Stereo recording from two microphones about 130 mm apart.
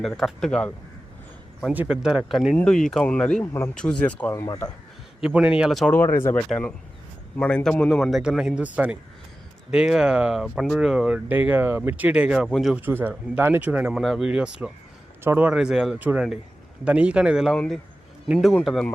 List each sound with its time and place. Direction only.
0.2 s speech: centre (ahead or behind)
1.7 s speech: 10° right (ahead or behind)
2.6 s speech: 5° left (ahead or behind)
3.4 s speech: 20° left (ahead or behind)
5.2 s speech: 10° right (ahead or behind)
5.9 s speech: 20° left (ahead or behind)
6.5 s speech: 10° left (ahead or behind); by 12.5 s 10° right (ahead or behind)
12.5 s speech: 5° left (ahead or behind)
12.7 s speech: 15° right (ahead or behind); by 18.9 s 5° left (ahead or behind)